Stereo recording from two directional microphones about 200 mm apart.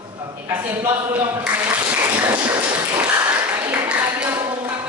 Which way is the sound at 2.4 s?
10° right (ahead or behind).